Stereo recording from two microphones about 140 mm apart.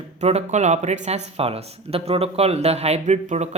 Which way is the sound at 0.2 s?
50° right (ahead or behind).